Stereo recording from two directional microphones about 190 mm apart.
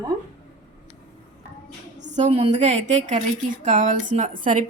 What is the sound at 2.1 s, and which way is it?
A woman's voice, 35° right (ahead or behind).